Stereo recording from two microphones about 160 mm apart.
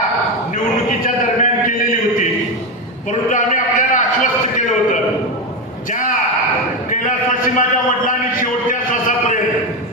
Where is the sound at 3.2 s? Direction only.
55° left (ahead or behind).